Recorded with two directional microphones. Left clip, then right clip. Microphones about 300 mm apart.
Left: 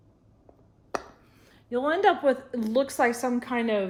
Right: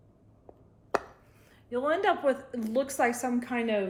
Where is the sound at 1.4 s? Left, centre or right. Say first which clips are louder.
Left 2 dB; left.